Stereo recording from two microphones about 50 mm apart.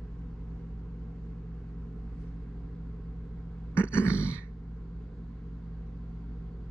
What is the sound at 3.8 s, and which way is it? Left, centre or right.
Grunt, left.